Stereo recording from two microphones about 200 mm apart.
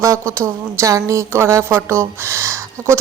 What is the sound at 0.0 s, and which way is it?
Speech, 15° right (ahead or behind).